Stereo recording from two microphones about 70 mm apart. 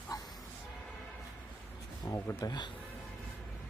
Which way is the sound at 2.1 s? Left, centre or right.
Left.